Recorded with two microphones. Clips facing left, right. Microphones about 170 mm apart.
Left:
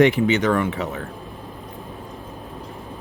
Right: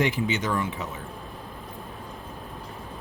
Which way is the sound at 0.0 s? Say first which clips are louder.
Left 9 dB; 65° left (ahead or behind).